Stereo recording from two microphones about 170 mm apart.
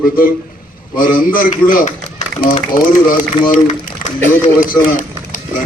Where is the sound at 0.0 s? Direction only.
55° left (ahead or behind).